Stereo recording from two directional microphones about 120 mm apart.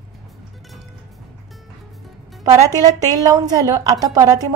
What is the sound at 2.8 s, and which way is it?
A woman's voice, 30° right (ahead or behind).